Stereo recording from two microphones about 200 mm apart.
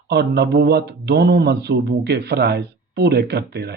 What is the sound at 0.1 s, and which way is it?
Speech, 55° right (ahead or behind).